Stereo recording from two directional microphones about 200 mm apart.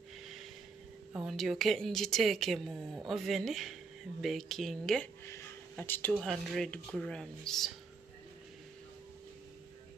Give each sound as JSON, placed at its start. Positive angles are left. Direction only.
{"t": 1.1, "sound": "speech", "side_deg": 0}